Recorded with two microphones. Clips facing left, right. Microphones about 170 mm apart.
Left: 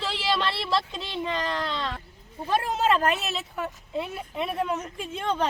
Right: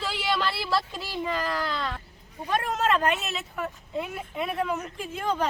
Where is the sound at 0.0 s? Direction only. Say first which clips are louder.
Left 1 dB; centre (ahead or behind).